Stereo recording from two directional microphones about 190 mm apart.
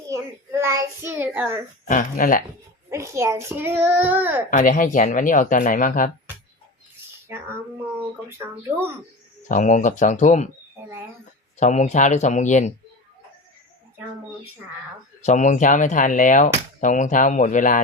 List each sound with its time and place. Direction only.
0.1 s a child's voice: 15° right (ahead or behind)
1.8 s speech: 45° left (ahead or behind)
2.9 s a child's voice: 15° right (ahead or behind)
4.5 s speech: 45° left (ahead or behind)
7.3 s a child's voice: 15° right (ahead or behind)
9.5 s speech: 45° left (ahead or behind)
11.6 s speech: 40° left (ahead or behind)
15.2 s speech: 40° left (ahead or behind)